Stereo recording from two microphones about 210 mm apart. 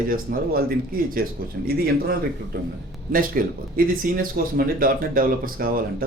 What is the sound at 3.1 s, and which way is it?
A man's voice, 45° right (ahead or behind).